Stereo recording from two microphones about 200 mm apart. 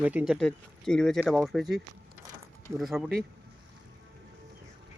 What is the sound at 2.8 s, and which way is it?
Speech, centre (ahead or behind).